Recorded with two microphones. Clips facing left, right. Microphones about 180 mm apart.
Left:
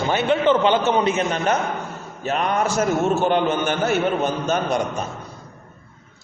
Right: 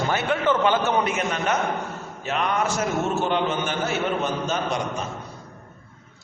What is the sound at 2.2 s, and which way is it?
Speech, 40° left (ahead or behind).